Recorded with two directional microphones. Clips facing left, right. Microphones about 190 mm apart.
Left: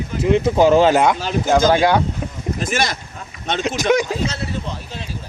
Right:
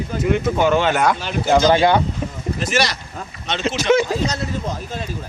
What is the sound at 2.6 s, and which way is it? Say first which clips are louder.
Speech: right 1 dB; 50° left (ahead or behind).